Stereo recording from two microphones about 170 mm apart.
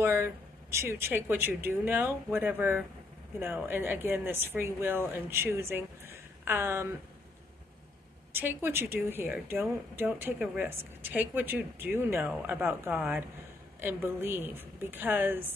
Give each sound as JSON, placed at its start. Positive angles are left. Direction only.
{"t": 0.0, "sound": "speech", "side_deg": -15}
{"t": 8.3, "sound": "a woman's voice", "side_deg": -15}